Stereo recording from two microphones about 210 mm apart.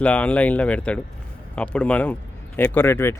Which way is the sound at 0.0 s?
5° left (ahead or behind).